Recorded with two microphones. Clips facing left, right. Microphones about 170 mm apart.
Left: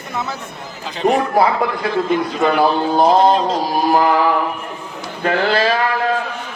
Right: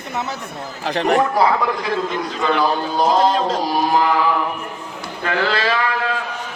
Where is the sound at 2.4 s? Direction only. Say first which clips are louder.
Left 2 dB; 50° left (ahead or behind).